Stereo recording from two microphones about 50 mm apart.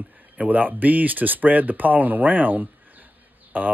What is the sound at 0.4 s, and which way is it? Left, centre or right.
Speech, right.